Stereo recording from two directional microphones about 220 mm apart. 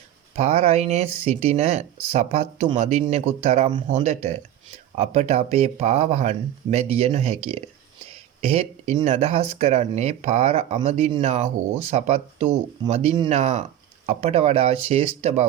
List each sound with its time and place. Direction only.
0.3 s speech: 30° right (ahead or behind)